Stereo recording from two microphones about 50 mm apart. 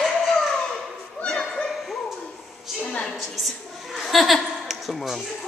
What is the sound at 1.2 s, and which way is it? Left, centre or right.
Bow-wow, left.